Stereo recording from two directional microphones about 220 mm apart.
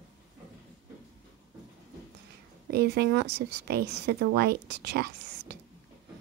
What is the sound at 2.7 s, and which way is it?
A woman's voice, 45° right (ahead or behind).